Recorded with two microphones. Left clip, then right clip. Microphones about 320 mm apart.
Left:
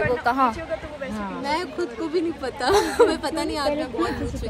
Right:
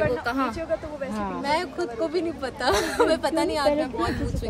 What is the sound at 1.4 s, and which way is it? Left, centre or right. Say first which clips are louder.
Speech: even; centre.